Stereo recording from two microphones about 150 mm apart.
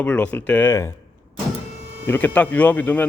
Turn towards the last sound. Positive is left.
turn(degrees=10)  # may be behind; listen again after turning